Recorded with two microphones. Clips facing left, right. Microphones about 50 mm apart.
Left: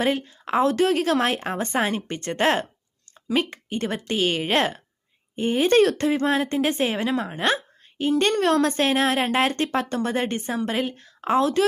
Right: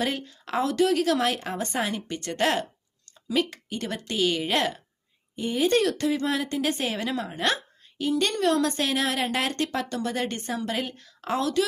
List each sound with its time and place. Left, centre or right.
0.0 s speech: left
8.1 s a woman's voice: left